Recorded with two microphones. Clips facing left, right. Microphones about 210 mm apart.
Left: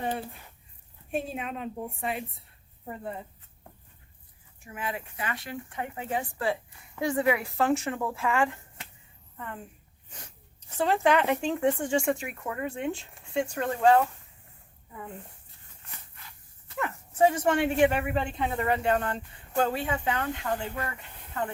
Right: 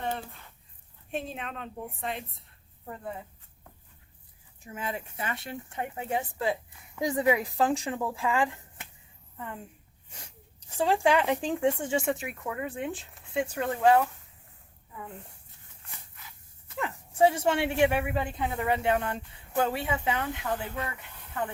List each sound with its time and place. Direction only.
0.0 s a sound: 10° left (ahead or behind)
1.1 s speech: 5° left (ahead or behind)
4.7 s speech: 25° right (ahead or behind)
10.7 s speech: 10° right (ahead or behind)
16.8 s speech: 10° right (ahead or behind)